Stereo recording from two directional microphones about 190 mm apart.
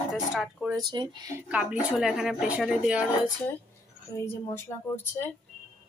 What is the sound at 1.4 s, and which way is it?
Speech, 5° right (ahead or behind).